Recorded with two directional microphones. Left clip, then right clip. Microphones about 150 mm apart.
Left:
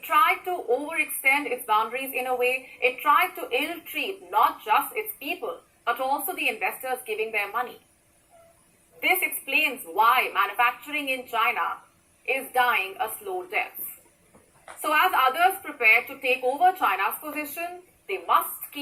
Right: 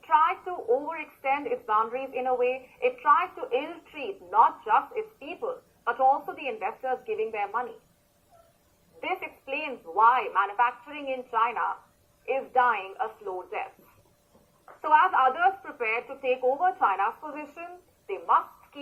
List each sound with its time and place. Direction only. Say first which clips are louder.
0.1 s a woman's voice: left 2 dB; 35° left (ahead or behind)
9.0 s a woman's voice: left 9 dB; 30° left (ahead or behind)
14.8 s a woman's voice: even; 35° left (ahead or behind)